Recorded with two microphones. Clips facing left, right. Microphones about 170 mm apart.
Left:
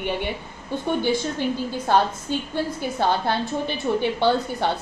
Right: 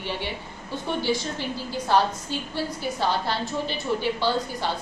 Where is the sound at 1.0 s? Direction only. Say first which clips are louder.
Left 2 dB; 55° left (ahead or behind).